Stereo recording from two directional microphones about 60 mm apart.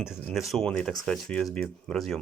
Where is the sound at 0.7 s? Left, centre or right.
Centre.